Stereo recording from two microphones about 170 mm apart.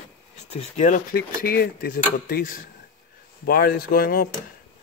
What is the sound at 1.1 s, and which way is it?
Speech, 65° left (ahead or behind).